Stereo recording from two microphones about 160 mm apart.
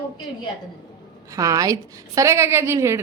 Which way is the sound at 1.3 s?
20° right (ahead or behind).